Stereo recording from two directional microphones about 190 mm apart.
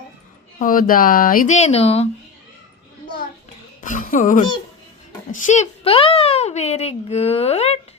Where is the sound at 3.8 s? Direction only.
45° left (ahead or behind).